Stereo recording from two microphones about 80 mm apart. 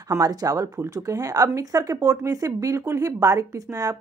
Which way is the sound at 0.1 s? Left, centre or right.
Right.